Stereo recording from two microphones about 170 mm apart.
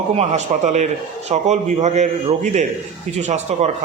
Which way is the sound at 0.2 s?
45° right (ahead or behind).